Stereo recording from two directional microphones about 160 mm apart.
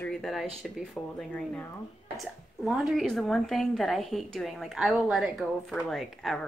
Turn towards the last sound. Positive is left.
turn(degrees=0)  # may be behind; listen again after turning